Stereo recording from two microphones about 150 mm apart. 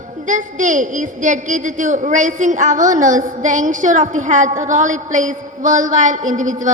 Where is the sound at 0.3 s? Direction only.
55° right (ahead or behind).